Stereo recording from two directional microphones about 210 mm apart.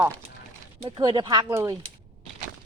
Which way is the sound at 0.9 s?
25° right (ahead or behind).